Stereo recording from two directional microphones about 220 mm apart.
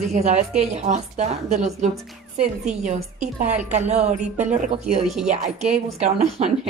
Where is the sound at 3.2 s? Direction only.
30° right (ahead or behind).